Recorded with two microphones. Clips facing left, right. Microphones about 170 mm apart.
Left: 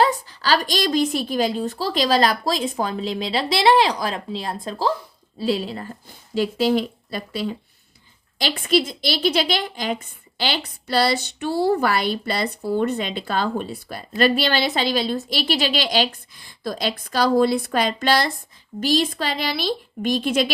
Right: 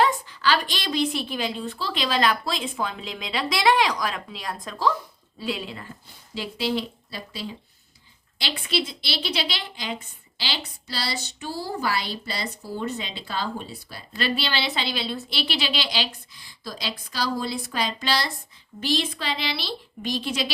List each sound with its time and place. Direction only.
0.0 s a woman's voice: 40° left (ahead or behind); by 7.5 s 55° left (ahead or behind)
8.4 s a woman's voice: 45° left (ahead or behind)
18.8 s a woman's voice: 40° left (ahead or behind)